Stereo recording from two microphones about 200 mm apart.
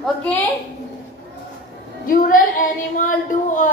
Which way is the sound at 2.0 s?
45° left (ahead or behind).